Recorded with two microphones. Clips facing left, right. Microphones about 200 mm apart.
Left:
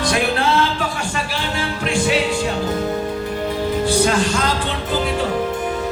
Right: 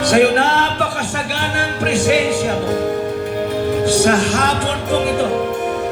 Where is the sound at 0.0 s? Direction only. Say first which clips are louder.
Right 6 dB; 65° right (ahead or behind).